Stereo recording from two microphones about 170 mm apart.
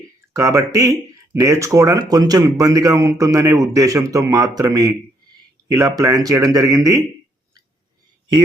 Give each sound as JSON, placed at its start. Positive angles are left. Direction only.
{"t": 0.3, "sound": "speech", "side_deg": -20}